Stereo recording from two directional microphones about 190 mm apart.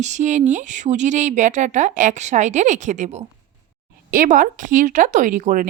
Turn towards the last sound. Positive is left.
turn(degrees=-45)  # may be behind; listen again after turning